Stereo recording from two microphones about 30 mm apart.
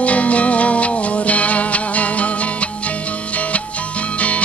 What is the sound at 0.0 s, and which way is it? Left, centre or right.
Music, left.